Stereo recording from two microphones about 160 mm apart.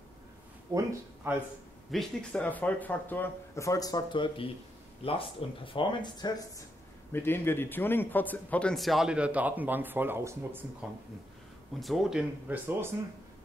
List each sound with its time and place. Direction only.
0.7 s a man's voice: 20° right (ahead or behind)
1.9 s a man's voice: centre (ahead or behind); by 6.3 s 25° left (ahead or behind)
7.1 s a man's voice: 15° left (ahead or behind); by 10.9 s 15° right (ahead or behind)
11.8 s a man's voice: centre (ahead or behind)